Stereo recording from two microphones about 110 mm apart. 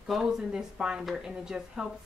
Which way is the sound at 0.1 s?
5° right (ahead or behind).